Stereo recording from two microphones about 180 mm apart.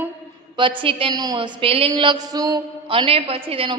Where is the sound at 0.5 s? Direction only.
25° right (ahead or behind).